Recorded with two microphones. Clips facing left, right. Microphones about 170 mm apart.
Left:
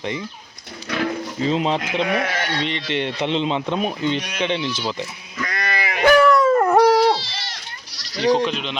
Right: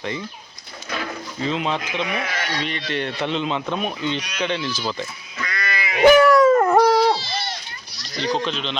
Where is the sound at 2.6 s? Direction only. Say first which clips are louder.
Left 1 dB; 25° left (ahead or behind).